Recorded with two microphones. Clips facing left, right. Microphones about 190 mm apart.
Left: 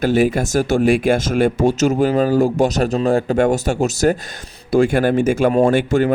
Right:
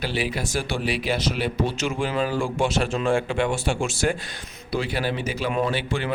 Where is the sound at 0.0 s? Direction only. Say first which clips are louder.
Left 11 dB; 45° left (ahead or behind).